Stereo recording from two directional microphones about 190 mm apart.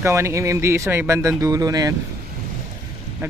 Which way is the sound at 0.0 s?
15° right (ahead or behind).